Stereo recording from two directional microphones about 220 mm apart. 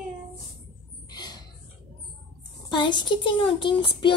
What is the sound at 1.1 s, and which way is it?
Rodents, 20° left (ahead or behind).